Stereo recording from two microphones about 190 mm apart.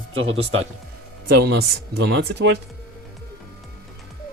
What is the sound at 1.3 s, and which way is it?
Speech, 55° right (ahead or behind).